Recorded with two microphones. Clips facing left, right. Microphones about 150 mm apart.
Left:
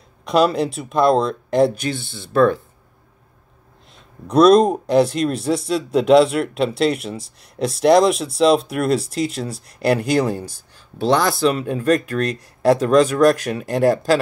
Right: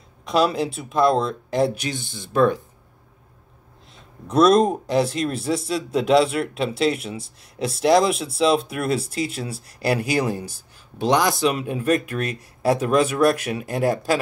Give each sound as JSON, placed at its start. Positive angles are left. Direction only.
{"t": 0.2, "sound": "speech", "side_deg": 0}
{"t": 2.1, "sound": "speech", "side_deg": -15}
{"t": 4.3, "sound": "speech", "side_deg": 0}